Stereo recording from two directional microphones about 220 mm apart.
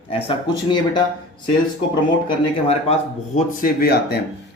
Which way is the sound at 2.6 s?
30° left (ahead or behind).